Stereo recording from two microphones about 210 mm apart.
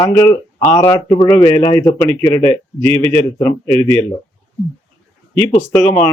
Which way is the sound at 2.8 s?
25° right (ahead or behind).